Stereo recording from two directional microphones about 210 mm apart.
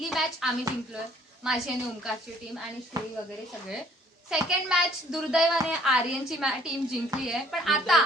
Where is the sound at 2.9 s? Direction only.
15° right (ahead or behind).